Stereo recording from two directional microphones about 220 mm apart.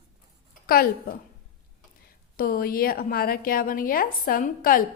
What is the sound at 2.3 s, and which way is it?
A woman's voice, 40° left (ahead or behind).